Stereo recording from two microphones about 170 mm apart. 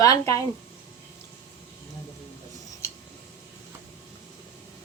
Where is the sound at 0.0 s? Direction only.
20° left (ahead or behind).